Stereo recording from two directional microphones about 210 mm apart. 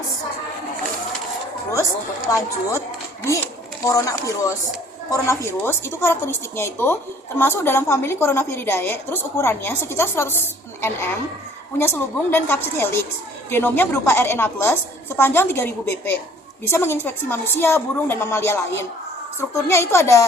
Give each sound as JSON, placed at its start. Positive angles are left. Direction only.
{"t": 2.2, "sound": "a woman's voice", "side_deg": 15}